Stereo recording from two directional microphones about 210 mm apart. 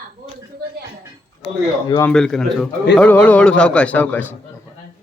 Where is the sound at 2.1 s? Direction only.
5° left (ahead or behind).